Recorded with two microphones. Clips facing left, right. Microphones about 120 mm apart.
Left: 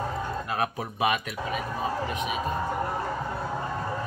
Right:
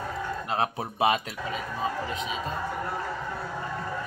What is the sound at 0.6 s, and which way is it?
Speech, 25° right (ahead or behind).